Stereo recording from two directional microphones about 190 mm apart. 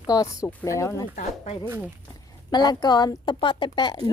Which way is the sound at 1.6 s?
10° right (ahead or behind).